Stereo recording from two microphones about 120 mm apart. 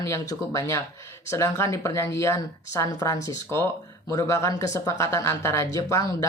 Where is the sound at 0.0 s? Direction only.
25° left (ahead or behind).